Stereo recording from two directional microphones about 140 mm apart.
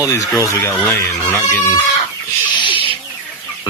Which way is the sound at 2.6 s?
40° left (ahead or behind).